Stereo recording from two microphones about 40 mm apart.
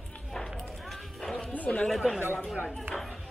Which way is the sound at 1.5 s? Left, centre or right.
Left.